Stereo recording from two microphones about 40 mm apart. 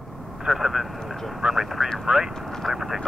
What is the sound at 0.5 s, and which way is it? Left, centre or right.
Speech, centre.